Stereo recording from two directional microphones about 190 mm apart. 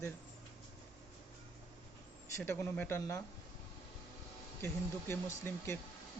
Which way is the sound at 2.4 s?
10° left (ahead or behind).